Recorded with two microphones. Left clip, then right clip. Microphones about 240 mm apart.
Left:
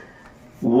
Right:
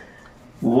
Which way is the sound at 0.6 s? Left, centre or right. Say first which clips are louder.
Even; right.